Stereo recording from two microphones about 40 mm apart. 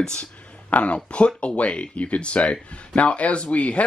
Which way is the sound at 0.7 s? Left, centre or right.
Left.